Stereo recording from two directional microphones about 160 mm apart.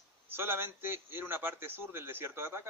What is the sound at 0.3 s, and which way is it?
A man's voice, 15° right (ahead or behind).